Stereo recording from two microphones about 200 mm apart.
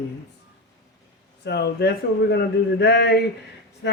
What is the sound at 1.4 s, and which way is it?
Speech, 55° left (ahead or behind).